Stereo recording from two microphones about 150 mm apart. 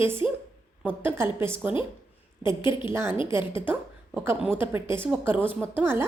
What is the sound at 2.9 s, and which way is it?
A woman's voice, 15° right (ahead or behind).